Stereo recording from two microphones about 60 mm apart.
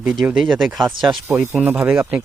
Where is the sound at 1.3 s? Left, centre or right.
Right.